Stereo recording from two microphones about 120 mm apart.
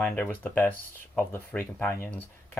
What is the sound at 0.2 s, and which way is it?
Speech, 15° left (ahead or behind).